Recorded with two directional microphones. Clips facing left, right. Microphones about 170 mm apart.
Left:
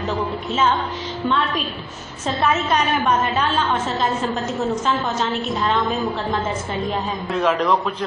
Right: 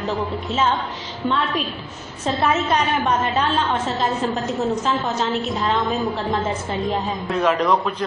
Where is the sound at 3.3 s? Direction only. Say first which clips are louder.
Even; 30° right (ahead or behind).